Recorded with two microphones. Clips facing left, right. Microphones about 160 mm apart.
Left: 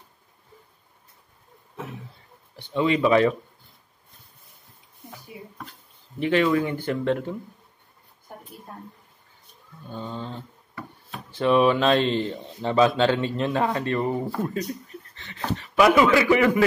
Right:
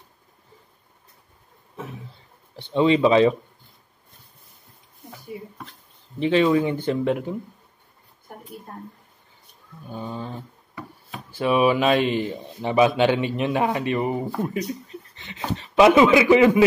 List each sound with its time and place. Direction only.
2.5 s speech: 30° right (ahead or behind)
6.1 s speech: 20° right (ahead or behind)
9.8 s speech: 10° right (ahead or behind)
14.2 s speech: centre (ahead or behind)
14.7 s speech: 20° right (ahead or behind)